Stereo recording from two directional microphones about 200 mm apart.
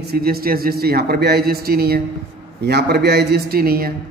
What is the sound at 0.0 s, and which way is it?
A man's voice, 50° right (ahead or behind).